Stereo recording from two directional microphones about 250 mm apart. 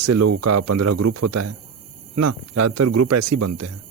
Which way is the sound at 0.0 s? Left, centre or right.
Right.